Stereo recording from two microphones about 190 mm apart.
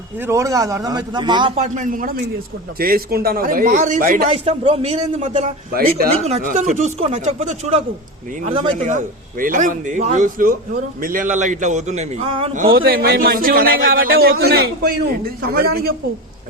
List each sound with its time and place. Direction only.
0.2 s a man's voice: 15° right (ahead or behind)
1.5 s a man's voice: 40° right (ahead or behind)
4.3 s a man's voice: 30° right (ahead or behind)
12.7 s a man's voice: 50° right (ahead or behind)